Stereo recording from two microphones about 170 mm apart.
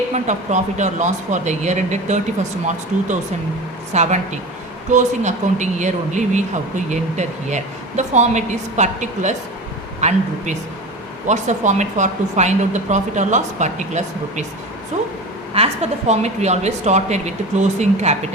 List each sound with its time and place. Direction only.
0.1 s speech: 45° right (ahead or behind)
15.5 s speech: 40° right (ahead or behind)